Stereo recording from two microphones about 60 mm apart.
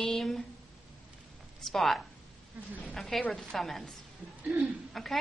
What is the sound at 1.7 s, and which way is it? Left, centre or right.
A woman's voice, centre.